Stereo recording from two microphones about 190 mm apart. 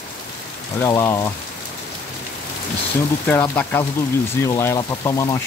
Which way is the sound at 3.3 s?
10° left (ahead or behind).